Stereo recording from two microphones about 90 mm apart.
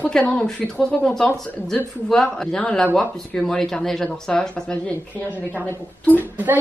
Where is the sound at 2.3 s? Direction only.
10° left (ahead or behind).